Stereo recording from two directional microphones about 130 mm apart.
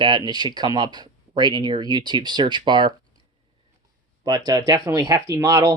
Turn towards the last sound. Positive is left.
turn(degrees=-25)  # may be behind; listen again after turning